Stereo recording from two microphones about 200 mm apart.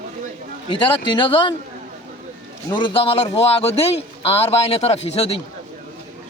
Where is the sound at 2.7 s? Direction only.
25° left (ahead or behind).